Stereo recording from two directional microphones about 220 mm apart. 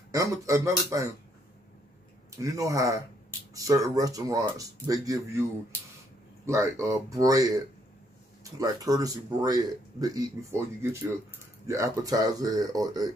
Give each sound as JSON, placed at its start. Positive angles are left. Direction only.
{"t": 0.1, "sound": "a man's voice", "side_deg": -15}
{"t": 2.3, "sound": "a man's voice", "side_deg": -15}
{"t": 6.4, "sound": "a man's voice", "side_deg": -15}